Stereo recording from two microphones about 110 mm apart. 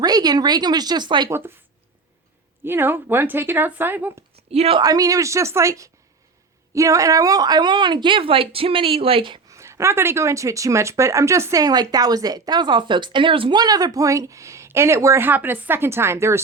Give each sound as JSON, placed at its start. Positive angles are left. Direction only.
{"t": 0.0, "sound": "speech", "side_deg": -35}
{"t": 1.3, "sound": "speech", "side_deg": -20}
{"t": 2.6, "sound": "speech", "side_deg": -20}
{"t": 4.5, "sound": "speech", "side_deg": -65}
{"t": 4.8, "sound": "a woman's voice", "side_deg": -35}
{"t": 9.5, "sound": "speech", "side_deg": -25}
{"t": 13.6, "sound": "speech", "side_deg": -35}